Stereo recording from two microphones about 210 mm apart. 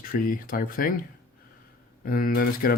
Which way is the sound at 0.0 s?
45° left (ahead or behind).